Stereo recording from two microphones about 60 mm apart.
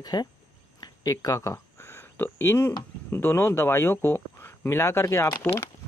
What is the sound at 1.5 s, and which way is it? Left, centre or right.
Speech, left.